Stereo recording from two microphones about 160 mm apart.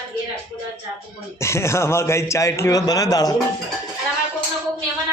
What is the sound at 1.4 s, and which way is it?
A man's voice, 15° left (ahead or behind).